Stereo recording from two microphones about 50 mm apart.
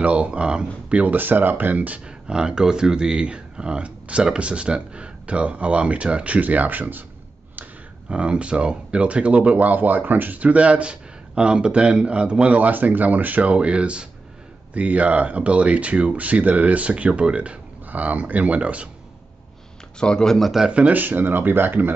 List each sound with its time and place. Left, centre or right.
0.0 s speech: right
2.0 s speech: centre; by 7.1 s right
8.1 s speech: right
17.8 s speech: right
20.0 s speech: centre
20.7 s speech: right
21.0 s speech: right